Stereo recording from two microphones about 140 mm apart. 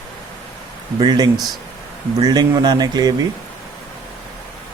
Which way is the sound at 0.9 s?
30° right (ahead or behind).